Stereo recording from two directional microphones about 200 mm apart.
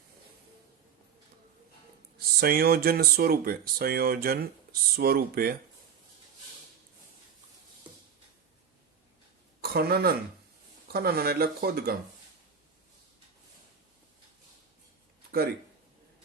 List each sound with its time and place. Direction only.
2.1 s speech: 50° right (ahead or behind)
9.6 s a woman's voice: 50° right (ahead or behind)